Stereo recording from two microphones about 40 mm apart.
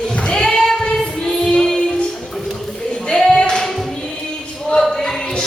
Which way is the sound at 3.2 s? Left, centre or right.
Centre.